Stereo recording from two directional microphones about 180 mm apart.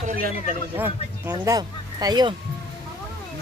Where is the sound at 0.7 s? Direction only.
10° right (ahead or behind).